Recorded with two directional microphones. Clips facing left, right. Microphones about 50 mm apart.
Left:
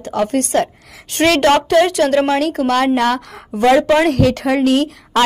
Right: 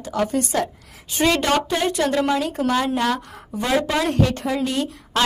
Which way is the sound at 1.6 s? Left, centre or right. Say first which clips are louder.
Left 8 dB; left.